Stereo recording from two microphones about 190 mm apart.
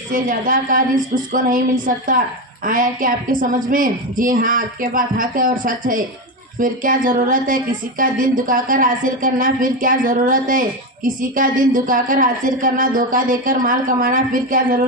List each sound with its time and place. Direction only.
0.1 s speech: 45° right (ahead or behind)